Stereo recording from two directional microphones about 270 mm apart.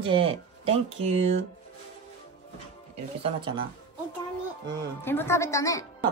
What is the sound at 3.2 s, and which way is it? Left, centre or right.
Speech, centre.